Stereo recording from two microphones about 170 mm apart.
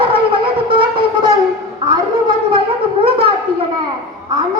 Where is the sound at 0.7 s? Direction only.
30° right (ahead or behind).